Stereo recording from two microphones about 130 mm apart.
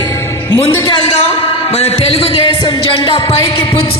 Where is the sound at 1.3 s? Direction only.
50° left (ahead or behind).